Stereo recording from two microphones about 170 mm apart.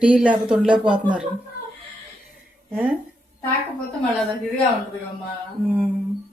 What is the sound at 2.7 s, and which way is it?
Speech, 10° right (ahead or behind).